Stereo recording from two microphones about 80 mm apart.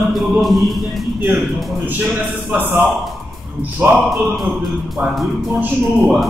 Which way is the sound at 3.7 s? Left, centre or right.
Centre.